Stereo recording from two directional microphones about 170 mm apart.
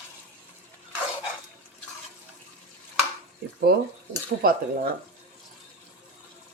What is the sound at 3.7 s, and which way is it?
Speech, 70° right (ahead or behind).